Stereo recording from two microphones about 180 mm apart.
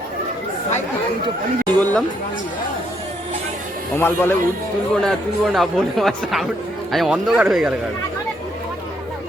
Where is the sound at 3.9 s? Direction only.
10° left (ahead or behind).